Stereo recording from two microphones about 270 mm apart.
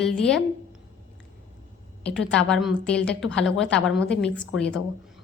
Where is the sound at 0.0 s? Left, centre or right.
Centre.